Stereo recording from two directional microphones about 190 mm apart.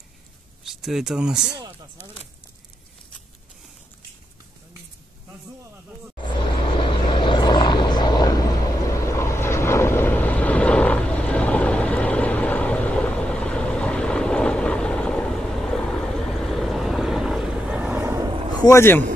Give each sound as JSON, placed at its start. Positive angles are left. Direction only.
{"t": 0.7, "sound": "speech", "side_deg": 0}
{"t": 6.8, "sound": "vehicle", "side_deg": 25}
{"t": 18.6, "sound": "speech", "side_deg": 15}